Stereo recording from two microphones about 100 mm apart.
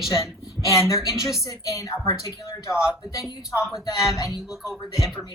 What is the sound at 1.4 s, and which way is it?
A woman's voice, 35° left (ahead or behind).